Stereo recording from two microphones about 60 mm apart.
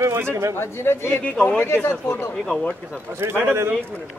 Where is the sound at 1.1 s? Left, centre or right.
Left.